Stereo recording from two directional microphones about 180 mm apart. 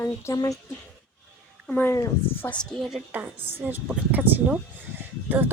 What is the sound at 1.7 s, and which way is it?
Speech, 10° left (ahead or behind).